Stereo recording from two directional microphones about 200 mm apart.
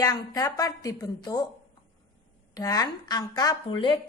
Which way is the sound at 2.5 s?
15° left (ahead or behind).